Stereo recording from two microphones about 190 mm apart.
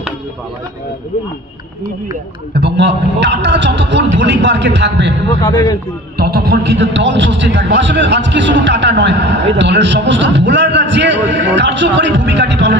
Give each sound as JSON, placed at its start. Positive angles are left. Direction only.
{"t": 2.5, "sound": "a man's voice", "side_deg": -65}
{"t": 5.4, "sound": "a man's voice", "side_deg": 25}
{"t": 6.1, "sound": "a man's voice", "side_deg": -55}